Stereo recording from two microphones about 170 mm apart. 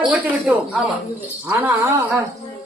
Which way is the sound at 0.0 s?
10° right (ahead or behind).